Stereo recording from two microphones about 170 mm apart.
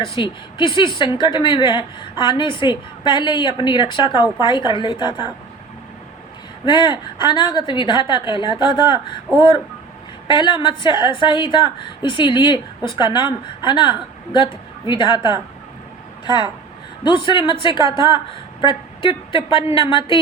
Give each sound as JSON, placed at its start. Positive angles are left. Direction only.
{"t": 0.1, "sound": "a woman's voice", "side_deg": 30}
{"t": 6.7, "sound": "a woman's voice", "side_deg": 25}
{"t": 9.3, "sound": "speech", "side_deg": 0}
{"t": 10.2, "sound": "a woman's voice", "side_deg": 30}